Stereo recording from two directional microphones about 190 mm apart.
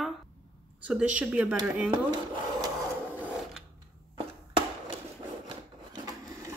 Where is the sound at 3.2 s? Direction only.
5° right (ahead or behind).